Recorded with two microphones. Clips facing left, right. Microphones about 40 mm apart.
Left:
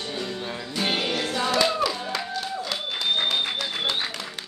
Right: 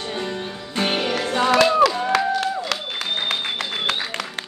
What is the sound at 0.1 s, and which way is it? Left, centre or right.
Music, right.